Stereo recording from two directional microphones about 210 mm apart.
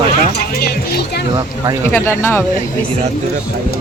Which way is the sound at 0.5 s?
45° left (ahead or behind).